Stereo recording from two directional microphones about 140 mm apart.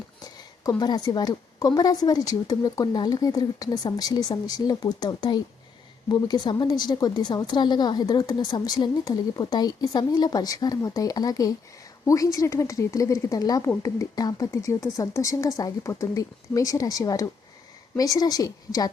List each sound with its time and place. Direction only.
0.3 s a woman's voice: 25° left (ahead or behind)